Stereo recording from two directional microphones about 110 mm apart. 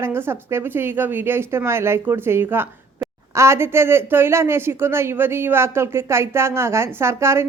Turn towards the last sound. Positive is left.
turn(degrees=-25)  # may be behind; listen again after turning